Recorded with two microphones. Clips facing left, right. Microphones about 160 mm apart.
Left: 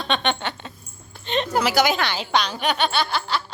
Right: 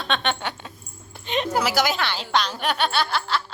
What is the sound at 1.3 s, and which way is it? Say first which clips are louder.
A woman's voice: left 1 dB; 10° right (ahead or behind).